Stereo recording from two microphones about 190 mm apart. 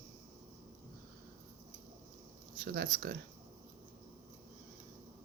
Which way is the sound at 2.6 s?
60° right (ahead or behind).